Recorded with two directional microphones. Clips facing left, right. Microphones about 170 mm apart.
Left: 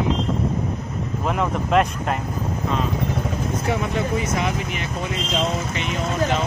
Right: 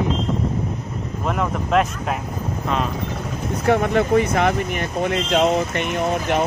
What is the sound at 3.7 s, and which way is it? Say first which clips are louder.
Speech: right 9 dB; 60° right (ahead or behind).